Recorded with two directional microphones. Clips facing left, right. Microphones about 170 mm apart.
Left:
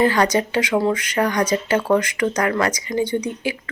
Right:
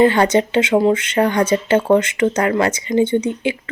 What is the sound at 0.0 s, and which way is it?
Speech, 25° right (ahead or behind).